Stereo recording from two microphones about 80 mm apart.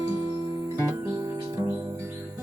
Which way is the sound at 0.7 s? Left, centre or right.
Right.